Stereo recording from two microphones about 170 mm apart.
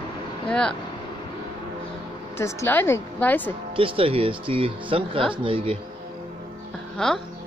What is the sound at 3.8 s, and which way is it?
Speech, 30° right (ahead or behind).